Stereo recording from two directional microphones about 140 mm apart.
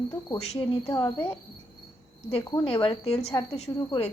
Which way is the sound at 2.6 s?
40° left (ahead or behind).